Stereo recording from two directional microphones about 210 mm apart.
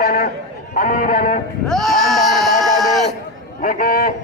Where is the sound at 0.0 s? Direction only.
45° left (ahead or behind).